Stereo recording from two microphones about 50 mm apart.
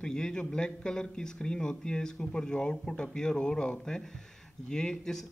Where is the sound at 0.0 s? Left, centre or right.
Centre.